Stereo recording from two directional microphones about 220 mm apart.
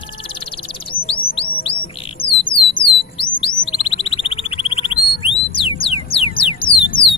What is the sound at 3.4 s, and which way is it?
Bird, 25° left (ahead or behind).